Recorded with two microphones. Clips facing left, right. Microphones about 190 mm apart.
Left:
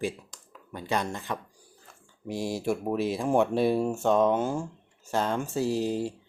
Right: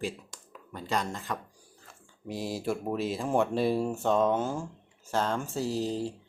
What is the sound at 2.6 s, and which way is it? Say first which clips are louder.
Speech: left 3 dB; 10° left (ahead or behind).